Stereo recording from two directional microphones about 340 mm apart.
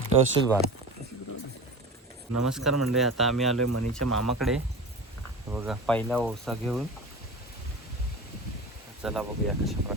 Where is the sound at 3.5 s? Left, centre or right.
Right.